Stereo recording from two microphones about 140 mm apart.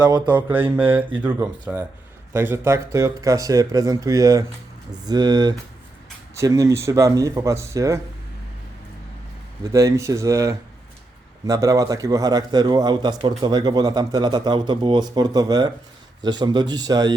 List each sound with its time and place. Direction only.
0.0 s speech: 30° right (ahead or behind)
0.3 s speech: 15° right (ahead or behind)
9.7 s speech: 20° right (ahead or behind)